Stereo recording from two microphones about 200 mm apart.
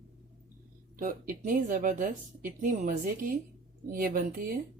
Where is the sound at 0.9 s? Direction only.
40° right (ahead or behind).